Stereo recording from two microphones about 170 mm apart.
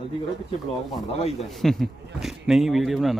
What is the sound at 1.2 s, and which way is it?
Speech, 40° left (ahead or behind).